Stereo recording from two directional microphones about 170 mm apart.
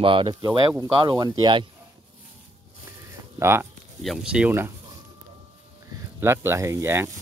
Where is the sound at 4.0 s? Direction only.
Centre (ahead or behind).